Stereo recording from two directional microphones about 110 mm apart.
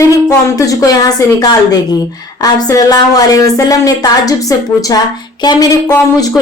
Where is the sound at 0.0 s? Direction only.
30° left (ahead or behind).